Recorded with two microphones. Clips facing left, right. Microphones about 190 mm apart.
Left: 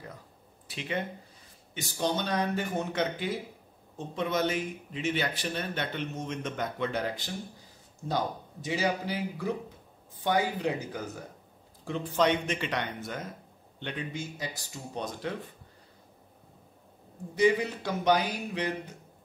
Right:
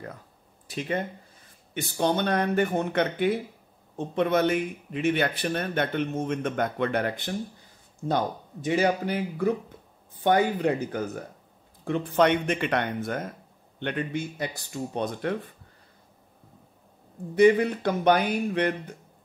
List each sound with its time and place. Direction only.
0.7 s speech: 45° right (ahead or behind)
1.7 s speech: 60° right (ahead or behind)
8.6 s speech: 55° right (ahead or behind)
17.4 s speech: 55° right (ahead or behind)